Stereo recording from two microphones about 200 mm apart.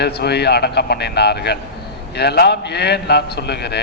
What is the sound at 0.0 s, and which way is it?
A man's voice, 55° left (ahead or behind).